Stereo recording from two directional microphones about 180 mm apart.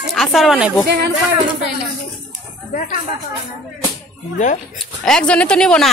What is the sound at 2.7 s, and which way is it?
Speech, 45° left (ahead or behind).